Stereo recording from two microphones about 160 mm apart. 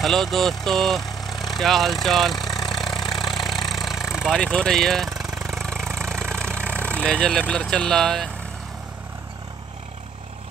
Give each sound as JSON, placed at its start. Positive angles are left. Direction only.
{"t": 0.0, "sound": "speech", "side_deg": 0}
{"t": 2.0, "sound": "vehicle", "side_deg": 0}
{"t": 6.9, "sound": "speech", "side_deg": 5}